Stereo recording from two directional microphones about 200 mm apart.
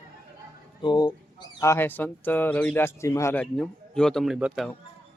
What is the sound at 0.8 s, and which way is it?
Speech, 20° left (ahead or behind).